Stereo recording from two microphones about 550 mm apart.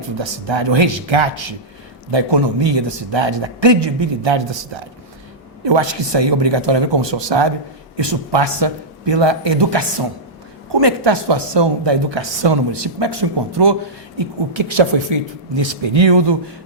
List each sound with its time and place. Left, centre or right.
0.2 s a woman's voice: right
14.2 s a woman's voice: right